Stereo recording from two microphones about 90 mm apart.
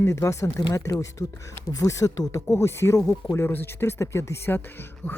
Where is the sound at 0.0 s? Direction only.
30° left (ahead or behind).